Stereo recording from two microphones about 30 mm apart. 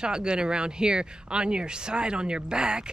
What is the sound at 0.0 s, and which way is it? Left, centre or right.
Speech, right.